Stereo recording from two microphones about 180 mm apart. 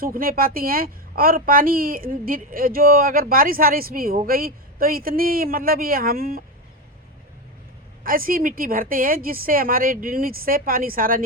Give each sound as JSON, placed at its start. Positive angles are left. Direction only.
{"t": 0.0, "sound": "a woman's voice", "side_deg": -55}
{"t": 8.0, "sound": "a woman's voice", "side_deg": -50}